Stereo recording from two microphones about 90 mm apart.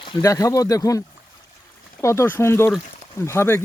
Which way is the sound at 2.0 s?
30° left (ahead or behind).